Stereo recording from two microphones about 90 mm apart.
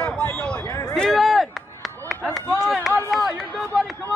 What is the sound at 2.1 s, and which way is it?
Run, centre (ahead or behind).